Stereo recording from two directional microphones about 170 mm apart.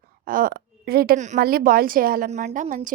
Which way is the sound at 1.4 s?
65° right (ahead or behind).